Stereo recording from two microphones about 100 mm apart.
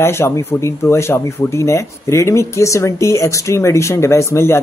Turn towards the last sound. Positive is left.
turn(degrees=25)  # may be behind; listen again after turning